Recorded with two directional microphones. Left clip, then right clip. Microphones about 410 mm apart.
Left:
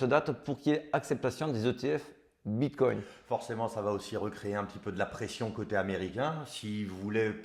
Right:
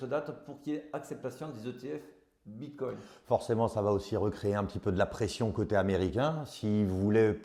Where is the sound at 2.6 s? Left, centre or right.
Left.